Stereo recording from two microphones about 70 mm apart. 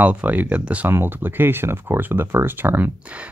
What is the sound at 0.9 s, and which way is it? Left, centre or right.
Speech, right.